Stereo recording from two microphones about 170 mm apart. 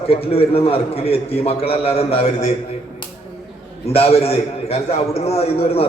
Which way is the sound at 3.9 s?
35° left (ahead or behind).